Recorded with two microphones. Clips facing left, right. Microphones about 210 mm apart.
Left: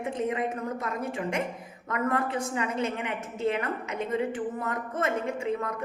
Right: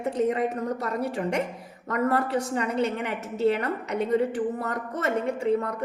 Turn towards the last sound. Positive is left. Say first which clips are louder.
# right 5 dB
turn(degrees=-35)  # may be behind; listen again after turning